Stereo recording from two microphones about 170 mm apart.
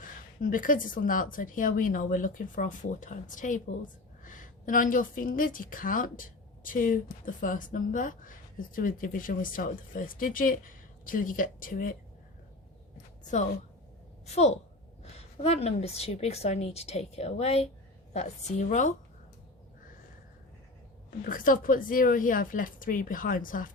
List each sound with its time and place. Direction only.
0.4 s a woman's voice: 50° left (ahead or behind)
14.3 s a woman's voice: 40° left (ahead or behind)
21.2 s a woman's voice: 55° left (ahead or behind)